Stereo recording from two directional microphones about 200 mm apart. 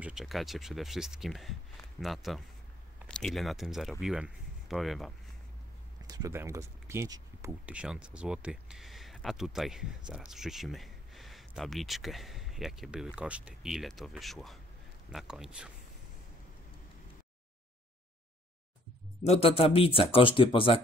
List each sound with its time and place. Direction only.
0.0 s speech: centre (ahead or behind)
6.0 s speech: 15° right (ahead or behind)
19.2 s speech: 30° left (ahead or behind)